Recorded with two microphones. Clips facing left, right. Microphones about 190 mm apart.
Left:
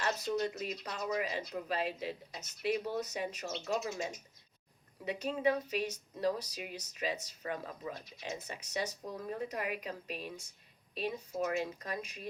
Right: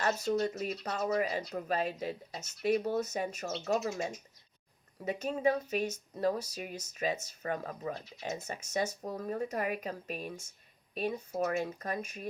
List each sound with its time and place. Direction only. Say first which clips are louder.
0.3 s speech: right 3 dB; 40° right (ahead or behind)
5.0 s speech: right 2 dB; 45° right (ahead or behind)